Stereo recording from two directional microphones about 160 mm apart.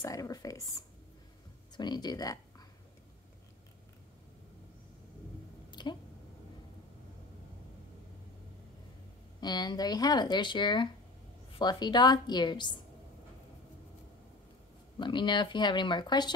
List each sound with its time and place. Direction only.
0.0 s speech: 20° left (ahead or behind)
5.7 s a sound: 30° left (ahead or behind)
9.4 s speech: 25° left (ahead or behind)
15.0 s speech: 30° left (ahead or behind)